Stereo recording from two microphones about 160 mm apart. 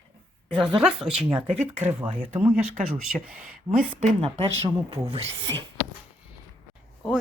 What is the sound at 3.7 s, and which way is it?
Speech, 20° right (ahead or behind).